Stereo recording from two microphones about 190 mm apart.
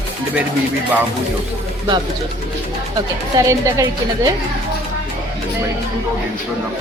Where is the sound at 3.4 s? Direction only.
20° right (ahead or behind).